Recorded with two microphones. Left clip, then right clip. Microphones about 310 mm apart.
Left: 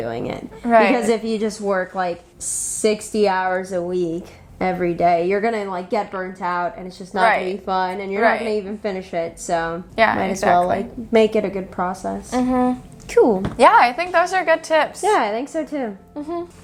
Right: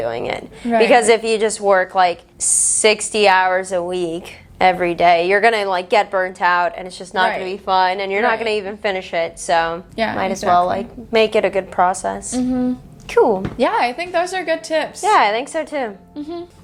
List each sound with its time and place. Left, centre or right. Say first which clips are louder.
0.0 s a woman's voice: right 4 dB; right
7.4 s a woman's voice: right 5 dB; right
9.9 s speech: left 5 dB; left
10.2 s a woman's voice: right 1 dB; right
12.3 s speech: left 6 dB; left
13.1 s speech: right 1 dB; right
13.6 s a woman's voice: left 8 dB; left
15.0 s a woman's voice: right 4 dB; right